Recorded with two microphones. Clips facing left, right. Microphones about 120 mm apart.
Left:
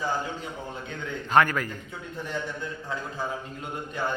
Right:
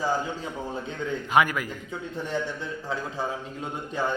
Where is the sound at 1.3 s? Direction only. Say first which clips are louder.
Left 1 dB; 10° right (ahead or behind).